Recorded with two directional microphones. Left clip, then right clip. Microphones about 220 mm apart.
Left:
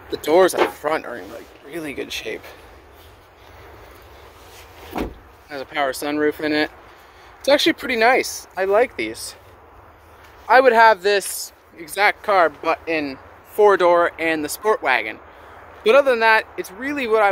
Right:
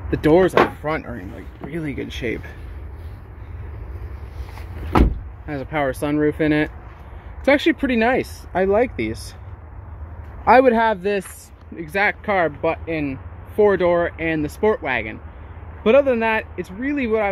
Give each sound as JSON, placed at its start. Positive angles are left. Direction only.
{"t": 0.3, "sound": "speech", "side_deg": 15}
{"t": 5.5, "sound": "speech", "side_deg": 0}
{"t": 10.5, "sound": "speech", "side_deg": 0}
{"t": 12.7, "sound": "speech", "side_deg": 20}
{"t": 13.6, "sound": "speech", "side_deg": 10}